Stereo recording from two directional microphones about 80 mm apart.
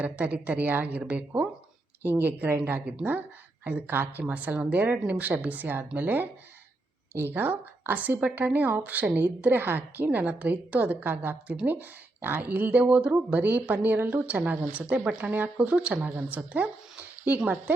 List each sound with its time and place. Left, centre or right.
0.0 s speech: centre